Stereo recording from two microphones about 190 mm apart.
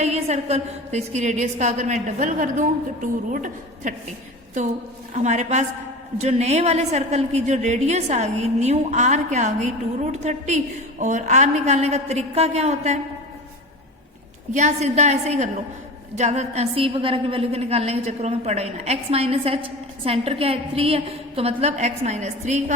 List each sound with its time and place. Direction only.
0.0 s a woman's voice: 35° right (ahead or behind)
5.1 s a woman's voice: 40° right (ahead or behind)
14.5 s a woman's voice: 35° right (ahead or behind)